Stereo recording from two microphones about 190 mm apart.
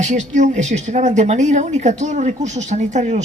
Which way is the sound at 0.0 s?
40° right (ahead or behind).